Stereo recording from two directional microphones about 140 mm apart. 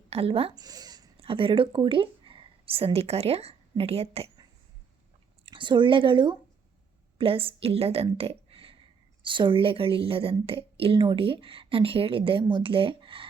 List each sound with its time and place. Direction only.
0.1 s speech: 45° right (ahead or behind)
0.5 s a sound: 30° right (ahead or behind)
1.1 s speech: 40° right (ahead or behind)
5.5 s a woman's voice: 35° right (ahead or behind)